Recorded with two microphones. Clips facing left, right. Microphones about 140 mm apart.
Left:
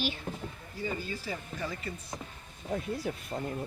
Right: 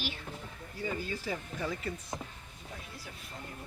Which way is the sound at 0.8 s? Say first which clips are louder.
Even; centre (ahead or behind).